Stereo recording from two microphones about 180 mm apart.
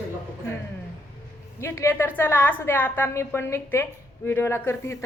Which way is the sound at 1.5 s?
15° left (ahead or behind).